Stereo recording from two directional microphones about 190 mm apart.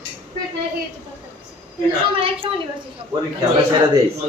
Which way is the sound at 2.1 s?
30° right (ahead or behind).